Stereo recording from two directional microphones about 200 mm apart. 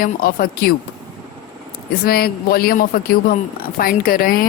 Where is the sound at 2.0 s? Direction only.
50° left (ahead or behind).